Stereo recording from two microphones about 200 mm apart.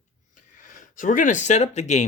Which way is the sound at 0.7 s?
40° left (ahead or behind).